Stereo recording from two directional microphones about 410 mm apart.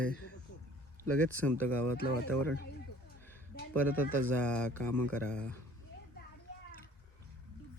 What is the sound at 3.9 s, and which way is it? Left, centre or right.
Speech, right.